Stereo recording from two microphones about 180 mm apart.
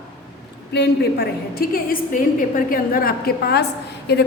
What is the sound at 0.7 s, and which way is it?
A woman's voice, 65° left (ahead or behind).